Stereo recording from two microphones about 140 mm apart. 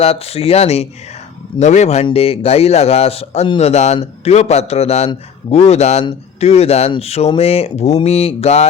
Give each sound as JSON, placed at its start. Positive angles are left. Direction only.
{"t": 0.0, "sound": "speech", "side_deg": 45}